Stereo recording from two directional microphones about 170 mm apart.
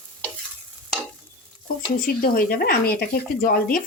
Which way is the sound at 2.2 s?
60° left (ahead or behind).